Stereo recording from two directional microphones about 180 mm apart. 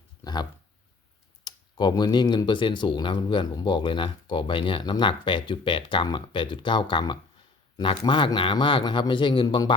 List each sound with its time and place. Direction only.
1.5 s speech: 25° left (ahead or behind)